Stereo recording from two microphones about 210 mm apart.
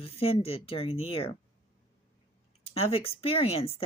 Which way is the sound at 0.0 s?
25° left (ahead or behind).